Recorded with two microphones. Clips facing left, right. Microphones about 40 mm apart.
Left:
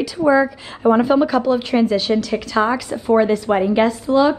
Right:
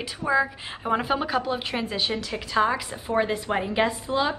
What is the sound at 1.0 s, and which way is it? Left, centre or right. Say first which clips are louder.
A woman's voice: left 10 dB; centre.